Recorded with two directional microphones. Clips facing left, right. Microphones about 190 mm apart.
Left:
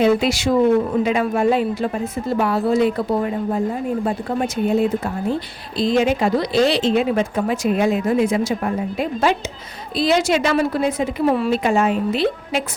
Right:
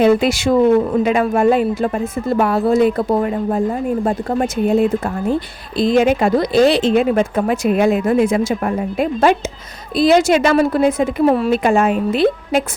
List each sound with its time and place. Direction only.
0.0 s a woman's voice: 50° right (ahead or behind)